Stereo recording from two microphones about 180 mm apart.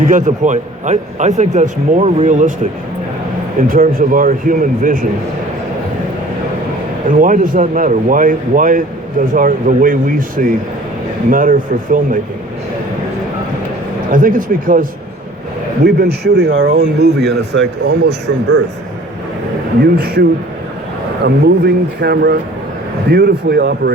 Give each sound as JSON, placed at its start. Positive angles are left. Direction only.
{"t": 0.0, "sound": "a man's voice", "side_deg": -45}
{"t": 3.6, "sound": "a man's voice", "side_deg": -50}
{"t": 7.1, "sound": "a man's voice", "side_deg": -50}
{"t": 14.1, "sound": "a man's voice", "side_deg": -50}
{"t": 15.8, "sound": "speech", "side_deg": -65}
{"t": 19.8, "sound": "a man's voice", "side_deg": -60}
{"t": 21.2, "sound": "a man's voice", "side_deg": -65}